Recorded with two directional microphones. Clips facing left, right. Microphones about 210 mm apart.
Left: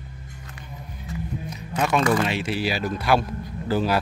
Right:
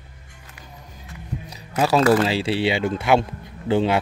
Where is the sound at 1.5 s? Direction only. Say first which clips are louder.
Right 4 dB; 35° right (ahead or behind).